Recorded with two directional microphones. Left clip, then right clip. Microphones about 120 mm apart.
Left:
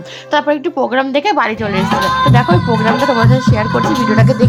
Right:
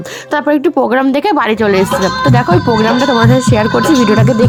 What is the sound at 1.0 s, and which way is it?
Music, 60° right (ahead or behind).